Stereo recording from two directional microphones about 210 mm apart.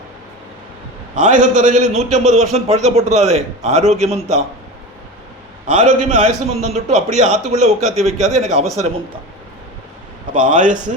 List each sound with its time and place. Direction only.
1.1 s a man's voice: 35° right (ahead or behind)
5.6 s a man's voice: 35° right (ahead or behind)
10.3 s a man's voice: 35° right (ahead or behind)